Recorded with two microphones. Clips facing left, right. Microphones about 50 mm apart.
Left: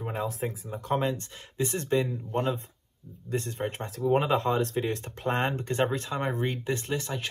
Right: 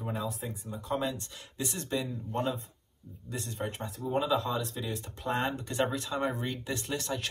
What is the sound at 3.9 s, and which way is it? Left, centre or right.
Speech, left.